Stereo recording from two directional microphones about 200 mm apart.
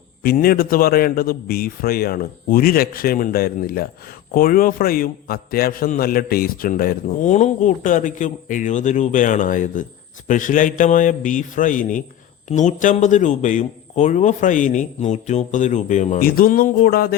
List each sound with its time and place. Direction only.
0.2 s a man's voice: 50° left (ahead or behind)